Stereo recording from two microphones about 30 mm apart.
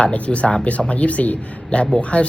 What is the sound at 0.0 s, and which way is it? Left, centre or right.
Speech, left.